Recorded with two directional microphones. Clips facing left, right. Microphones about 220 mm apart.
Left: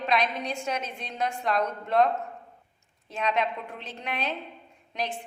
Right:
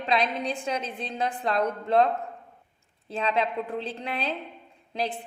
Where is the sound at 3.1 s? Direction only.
30° right (ahead or behind).